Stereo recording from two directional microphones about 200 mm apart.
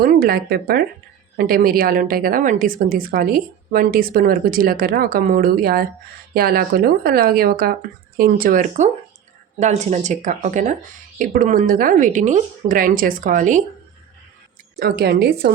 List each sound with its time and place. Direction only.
0.0 s a woman's voice: 50° right (ahead or behind)
14.8 s a woman's voice: 50° right (ahead or behind)